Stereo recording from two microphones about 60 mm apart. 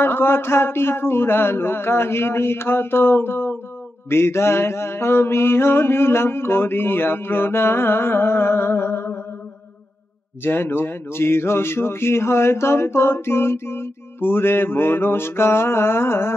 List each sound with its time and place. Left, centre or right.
0.0 s speech: left
4.1 s mantra: left
10.4 s speech: left